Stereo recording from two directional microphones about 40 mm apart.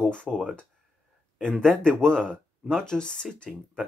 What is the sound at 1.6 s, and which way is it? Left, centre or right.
Speech, centre.